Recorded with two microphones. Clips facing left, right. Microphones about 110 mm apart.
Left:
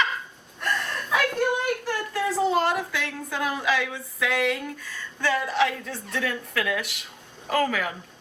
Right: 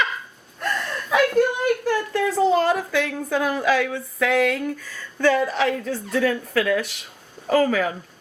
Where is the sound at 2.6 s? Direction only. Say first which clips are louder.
Right 5 dB; 45° right (ahead or behind).